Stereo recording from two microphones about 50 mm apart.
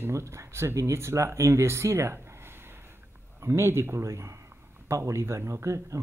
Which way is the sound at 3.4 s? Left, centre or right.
Right.